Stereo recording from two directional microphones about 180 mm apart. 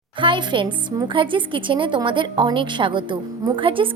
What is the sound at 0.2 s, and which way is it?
A woman's voice, 25° right (ahead or behind).